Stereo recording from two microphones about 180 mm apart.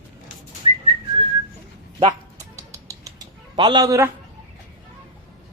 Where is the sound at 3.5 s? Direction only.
20° right (ahead or behind).